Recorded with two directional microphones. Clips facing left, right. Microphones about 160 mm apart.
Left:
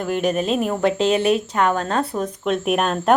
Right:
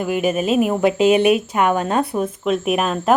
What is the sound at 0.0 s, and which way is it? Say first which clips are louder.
A woman's voice: right 2 dB; 5° right (ahead or behind).